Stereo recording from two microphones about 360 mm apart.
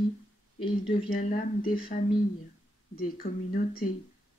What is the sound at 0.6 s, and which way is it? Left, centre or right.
A man's voice, centre.